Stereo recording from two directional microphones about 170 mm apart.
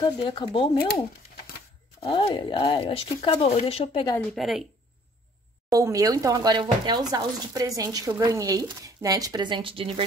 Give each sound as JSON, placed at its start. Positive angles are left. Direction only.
{"t": 0.0, "sound": "speech", "side_deg": 30}
{"t": 0.7, "sound": "speech", "side_deg": 65}
{"t": 2.0, "sound": "speech", "side_deg": 35}
{"t": 4.4, "sound": "speech", "side_deg": 0}
{"t": 5.7, "sound": "speech", "side_deg": -20}